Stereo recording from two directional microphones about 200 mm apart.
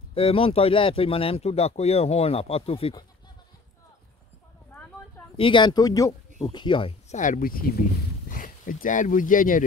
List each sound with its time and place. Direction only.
0.1 s speech: 30° left (ahead or behind)
5.4 s speech: 25° left (ahead or behind); by 9.6 s 40° left (ahead or behind)